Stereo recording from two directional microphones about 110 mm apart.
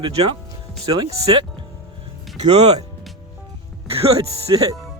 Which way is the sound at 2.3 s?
80° right.